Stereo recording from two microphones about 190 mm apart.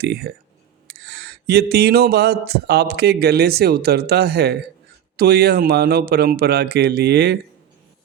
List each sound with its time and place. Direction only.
0.0 s speech: 60° right (ahead or behind)